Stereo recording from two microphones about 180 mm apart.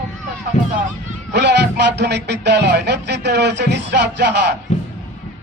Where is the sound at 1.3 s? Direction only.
70° right (ahead or behind).